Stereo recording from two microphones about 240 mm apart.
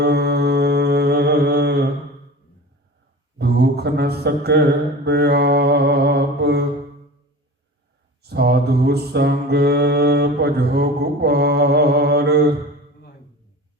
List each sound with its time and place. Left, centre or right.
0.0 s mantra: right
3.3 s a sound: right
5.0 s mantra: right
8.2 s mantra: right